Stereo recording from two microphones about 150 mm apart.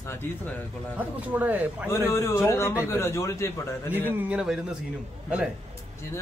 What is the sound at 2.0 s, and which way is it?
A man's voice, 20° left (ahead or behind).